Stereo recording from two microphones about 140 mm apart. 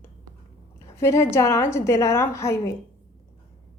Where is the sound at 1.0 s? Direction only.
20° left (ahead or behind).